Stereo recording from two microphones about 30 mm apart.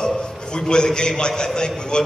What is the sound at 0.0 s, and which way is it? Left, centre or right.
A man's voice, left.